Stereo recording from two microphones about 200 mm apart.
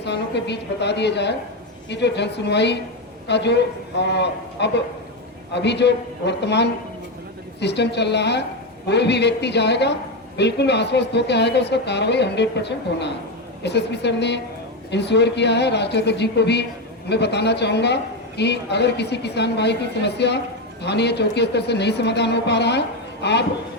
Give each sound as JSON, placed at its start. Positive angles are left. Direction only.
{"t": 0.0, "sound": "a woman's voice", "side_deg": 60}